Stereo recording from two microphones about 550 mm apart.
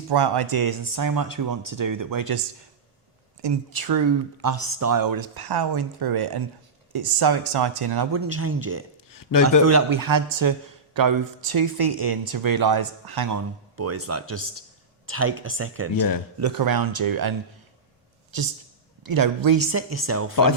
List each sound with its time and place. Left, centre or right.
0.1 s speech: right
3.4 s speech: right
8.1 s speech: right
9.1 s a sound: left
9.6 s speech: right
16.4 s speech: right
19.0 s speech: right
19.7 s speech: right